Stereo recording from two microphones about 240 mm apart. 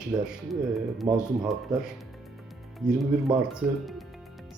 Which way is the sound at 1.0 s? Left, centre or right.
Right.